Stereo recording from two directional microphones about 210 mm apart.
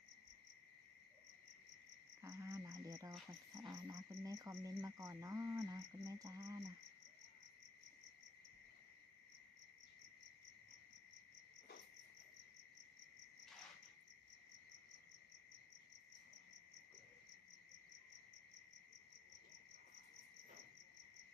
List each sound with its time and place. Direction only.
2.2 s cricket: 15° right (ahead or behind)